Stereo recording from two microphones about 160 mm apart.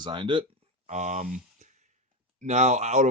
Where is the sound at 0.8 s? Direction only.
45° right (ahead or behind).